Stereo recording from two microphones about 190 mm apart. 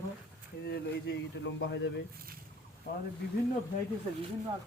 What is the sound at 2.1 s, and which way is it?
Speech, 50° right (ahead or behind).